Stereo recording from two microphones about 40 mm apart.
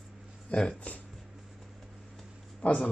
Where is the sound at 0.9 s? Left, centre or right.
Left.